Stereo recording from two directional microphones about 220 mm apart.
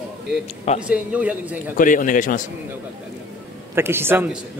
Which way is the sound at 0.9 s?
5° right (ahead or behind).